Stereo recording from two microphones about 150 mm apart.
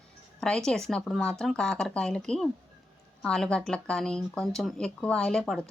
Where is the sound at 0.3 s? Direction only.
5° left (ahead or behind).